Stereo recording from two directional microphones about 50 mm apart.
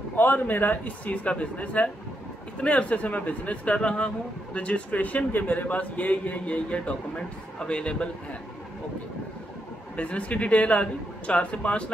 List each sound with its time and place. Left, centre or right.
0.1 s a man's voice: left
9.9 s speech: left